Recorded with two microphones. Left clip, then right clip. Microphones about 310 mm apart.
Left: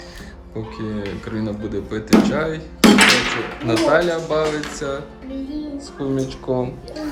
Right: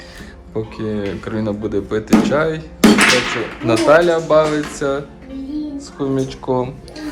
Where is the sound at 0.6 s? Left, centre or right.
Centre.